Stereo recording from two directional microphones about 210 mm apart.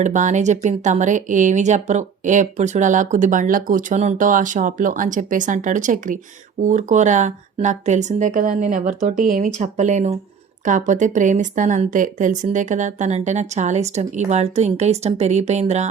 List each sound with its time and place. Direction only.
0.0 s speech: 35° right (ahead or behind)